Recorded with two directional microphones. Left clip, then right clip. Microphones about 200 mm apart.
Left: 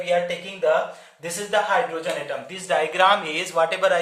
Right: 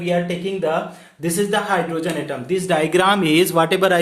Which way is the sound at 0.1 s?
35° right (ahead or behind).